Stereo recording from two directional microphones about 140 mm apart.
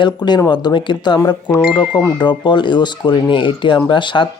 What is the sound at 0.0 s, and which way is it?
Speech, 30° left (ahead or behind).